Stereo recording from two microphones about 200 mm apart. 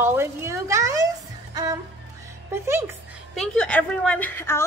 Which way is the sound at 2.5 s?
10° right (ahead or behind).